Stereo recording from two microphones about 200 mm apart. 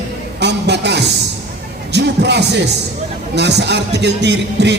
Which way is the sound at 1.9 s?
60° right (ahead or behind).